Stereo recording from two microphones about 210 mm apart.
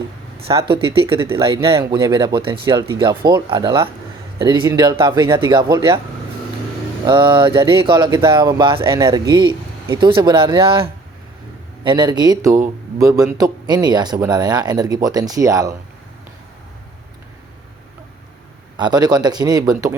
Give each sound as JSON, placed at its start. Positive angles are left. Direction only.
{"t": 0.7, "sound": "speech", "side_deg": -25}
{"t": 7.0, "sound": "speech", "side_deg": -25}
{"t": 18.8, "sound": "speech", "side_deg": -20}